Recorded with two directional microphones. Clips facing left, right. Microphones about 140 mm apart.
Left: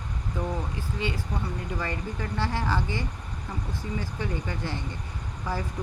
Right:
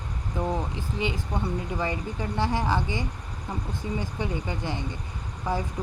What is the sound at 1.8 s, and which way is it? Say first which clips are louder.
Speech: right 3 dB; 15° right (ahead or behind).